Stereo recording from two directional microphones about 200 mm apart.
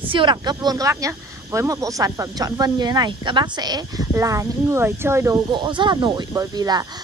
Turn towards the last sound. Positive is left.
turn(degrees=-20)  # may be behind; listen again after turning